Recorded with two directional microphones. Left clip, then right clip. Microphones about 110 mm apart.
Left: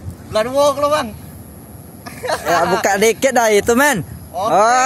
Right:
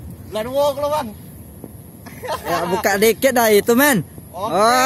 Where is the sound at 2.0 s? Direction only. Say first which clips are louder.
Left 5 dB; 15° right (ahead or behind).